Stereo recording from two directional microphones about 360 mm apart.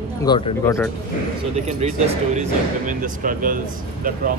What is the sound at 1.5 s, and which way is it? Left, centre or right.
Speech, centre.